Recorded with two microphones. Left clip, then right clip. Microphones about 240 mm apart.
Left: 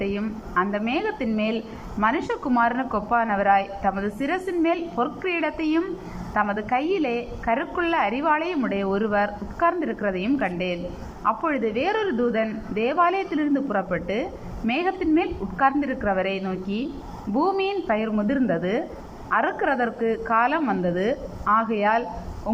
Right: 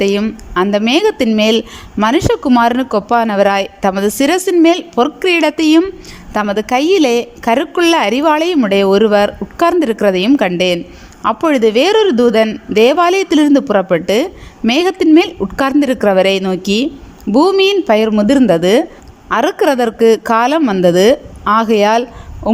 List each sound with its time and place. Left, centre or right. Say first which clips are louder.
0.0 s a woman's voice: right 14 dB; right
17.3 s a woman's voice: right 13 dB; right